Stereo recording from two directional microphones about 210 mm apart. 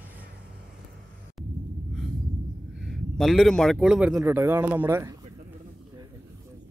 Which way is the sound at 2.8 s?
Centre (ahead or behind).